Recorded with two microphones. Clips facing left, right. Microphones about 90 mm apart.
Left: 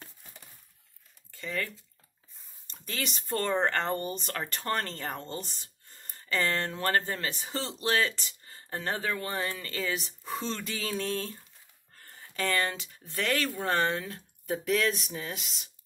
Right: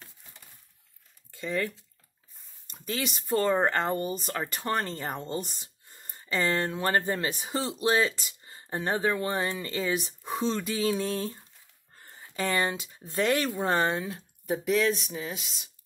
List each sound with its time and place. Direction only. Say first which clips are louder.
1.3 s speech: right 4 dB; 20° right (ahead or behind)
2.7 s speech: right 4 dB; 10° right (ahead or behind)
14.4 s speech: right 2 dB; 5° right (ahead or behind)